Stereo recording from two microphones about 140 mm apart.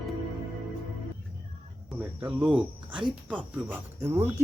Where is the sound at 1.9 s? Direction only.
10° right (ahead or behind).